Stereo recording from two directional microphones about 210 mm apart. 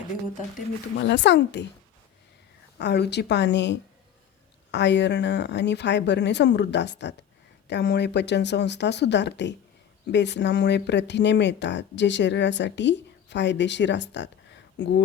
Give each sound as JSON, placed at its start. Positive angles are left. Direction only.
{"t": 0.9, "sound": "speech", "side_deg": 55}
{"t": 2.7, "sound": "speech", "side_deg": 55}